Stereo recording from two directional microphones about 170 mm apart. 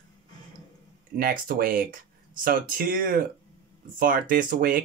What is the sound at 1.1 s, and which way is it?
Speech, 60° right (ahead or behind).